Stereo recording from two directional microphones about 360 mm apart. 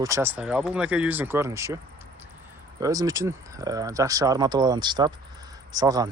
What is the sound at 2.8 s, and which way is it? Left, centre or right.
Speech, centre.